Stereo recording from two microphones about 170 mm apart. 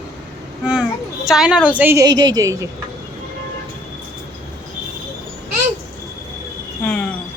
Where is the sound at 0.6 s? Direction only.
5° right (ahead or behind).